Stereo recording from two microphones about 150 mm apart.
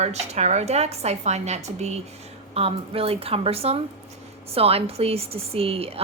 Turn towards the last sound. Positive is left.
turn(degrees=-40)  # may be behind; listen again after turning